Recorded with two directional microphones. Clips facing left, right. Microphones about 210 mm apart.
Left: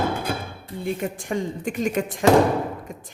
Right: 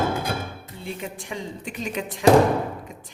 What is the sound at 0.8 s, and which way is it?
A woman's voice, 50° left (ahead or behind).